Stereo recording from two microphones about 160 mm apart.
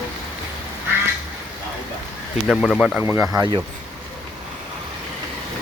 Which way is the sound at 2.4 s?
Centre (ahead or behind).